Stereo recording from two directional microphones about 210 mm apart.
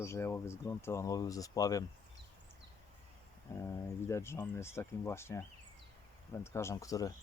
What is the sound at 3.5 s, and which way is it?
Speech, 10° left (ahead or behind).